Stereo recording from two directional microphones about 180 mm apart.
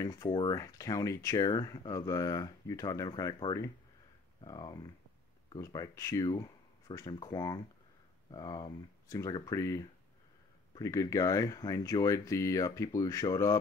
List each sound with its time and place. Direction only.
0.0 s speech: 20° left (ahead or behind)